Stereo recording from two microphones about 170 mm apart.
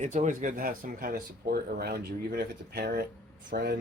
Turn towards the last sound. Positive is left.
turn(degrees=-65)  # may be behind; listen again after turning